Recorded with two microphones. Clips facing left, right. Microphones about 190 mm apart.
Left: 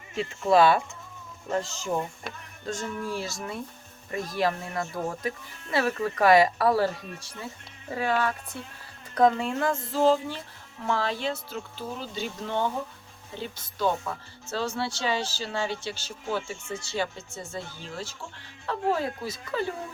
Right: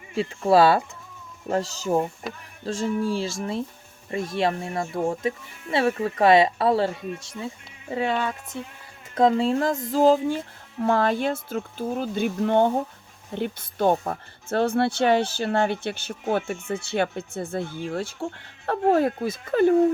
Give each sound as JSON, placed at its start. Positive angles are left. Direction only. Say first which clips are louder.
{"t": 0.1, "sound": "speech", "louder": "right 3 dB", "side_deg": -30}
{"t": 2.3, "sound": "speech", "louder": "right 5 dB", "side_deg": 0}
{"t": 2.6, "sound": "speech", "louder": "right 7 dB", "side_deg": -30}